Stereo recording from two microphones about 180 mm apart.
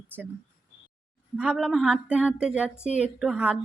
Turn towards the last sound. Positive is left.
turn(degrees=-5)  # may be behind; listen again after turning